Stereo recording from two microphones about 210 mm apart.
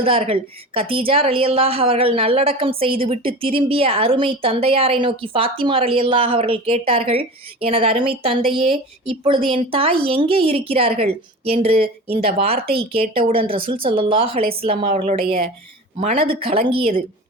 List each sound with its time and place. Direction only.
0.0 s speech: 25° right (ahead or behind)